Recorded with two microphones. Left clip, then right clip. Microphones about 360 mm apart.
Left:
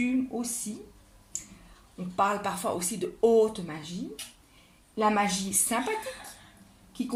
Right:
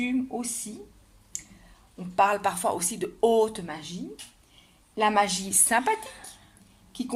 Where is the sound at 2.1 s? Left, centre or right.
Right.